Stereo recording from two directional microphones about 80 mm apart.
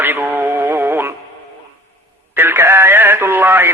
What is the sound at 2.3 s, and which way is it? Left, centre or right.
A man's voice, right.